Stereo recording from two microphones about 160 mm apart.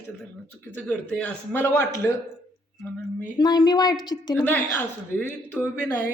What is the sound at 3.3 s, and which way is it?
A woman's voice, 25° left (ahead or behind).